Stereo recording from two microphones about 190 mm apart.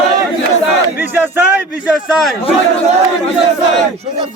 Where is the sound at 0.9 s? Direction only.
10° right (ahead or behind).